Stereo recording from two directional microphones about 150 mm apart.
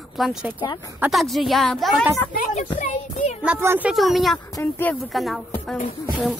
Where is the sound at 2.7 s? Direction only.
55° left (ahead or behind).